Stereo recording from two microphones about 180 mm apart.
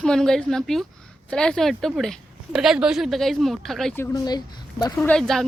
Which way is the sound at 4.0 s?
20° left (ahead or behind).